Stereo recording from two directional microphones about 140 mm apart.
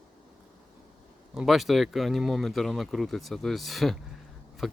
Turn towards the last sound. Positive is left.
turn(degrees=0)  # may be behind; listen again after turning